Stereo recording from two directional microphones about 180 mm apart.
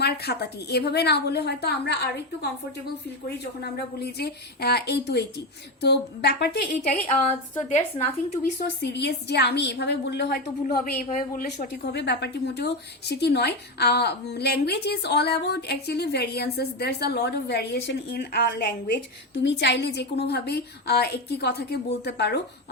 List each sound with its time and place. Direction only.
0.0 s a woman's voice: 65° left (ahead or behind)
8.0 s a woman's voice: 40° left (ahead or behind)
8.5 s a woman's voice: 70° left (ahead or behind)